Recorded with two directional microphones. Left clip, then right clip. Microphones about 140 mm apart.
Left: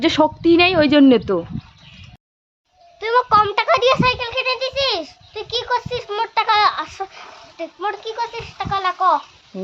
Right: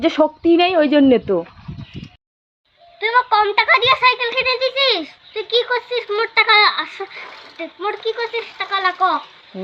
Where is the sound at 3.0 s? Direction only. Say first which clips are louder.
Even; 25° left (ahead or behind).